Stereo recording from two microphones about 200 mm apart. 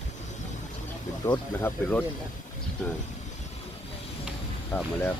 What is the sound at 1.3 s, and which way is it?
Speech, 10° left (ahead or behind).